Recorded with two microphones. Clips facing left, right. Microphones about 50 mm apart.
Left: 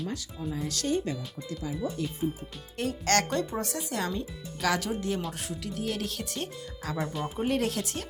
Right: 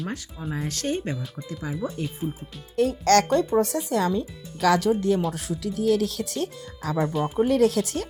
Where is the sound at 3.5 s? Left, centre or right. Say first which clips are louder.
Right 10 dB; right.